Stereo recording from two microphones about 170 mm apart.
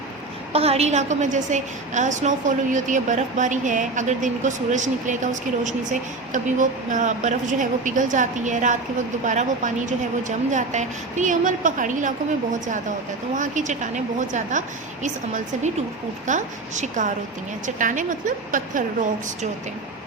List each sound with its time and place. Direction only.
0.5 s a woman's voice: 35° right (ahead or behind)